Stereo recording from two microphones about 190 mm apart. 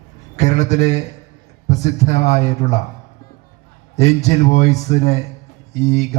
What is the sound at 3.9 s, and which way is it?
A man's voice, 35° left (ahead or behind).